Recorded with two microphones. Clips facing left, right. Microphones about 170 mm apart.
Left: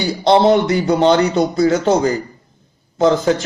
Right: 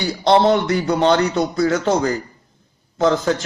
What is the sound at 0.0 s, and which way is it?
A man's voice, 15° left (ahead or behind).